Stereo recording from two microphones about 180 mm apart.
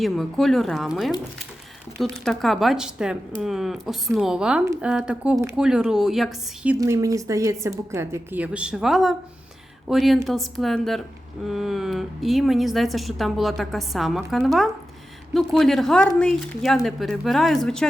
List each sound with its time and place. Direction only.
0.0 s a woman's voice: centre (ahead or behind)
6.7 s a woman's voice: 15° right (ahead or behind); by 17.8 s centre (ahead or behind)